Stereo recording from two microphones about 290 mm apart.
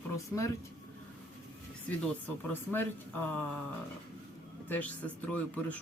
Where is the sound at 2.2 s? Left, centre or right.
Centre.